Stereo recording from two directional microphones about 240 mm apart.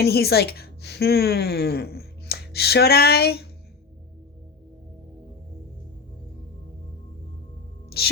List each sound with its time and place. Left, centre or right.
0.0 s speech: left
7.9 s music: left